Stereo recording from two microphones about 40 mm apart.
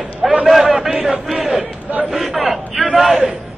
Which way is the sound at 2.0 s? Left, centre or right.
Centre.